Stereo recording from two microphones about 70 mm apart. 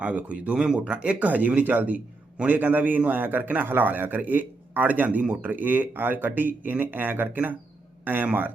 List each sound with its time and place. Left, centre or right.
0.0 s a man's voice: centre